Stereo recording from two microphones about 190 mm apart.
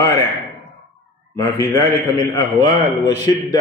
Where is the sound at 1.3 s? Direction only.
15° left (ahead or behind).